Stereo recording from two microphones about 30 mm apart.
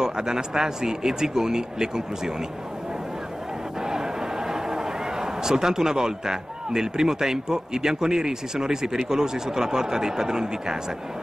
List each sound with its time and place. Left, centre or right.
0.0 s a man's voice: right
5.2 s a man's voice: centre